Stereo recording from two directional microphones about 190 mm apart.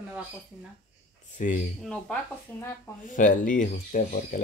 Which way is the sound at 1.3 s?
40° left (ahead or behind).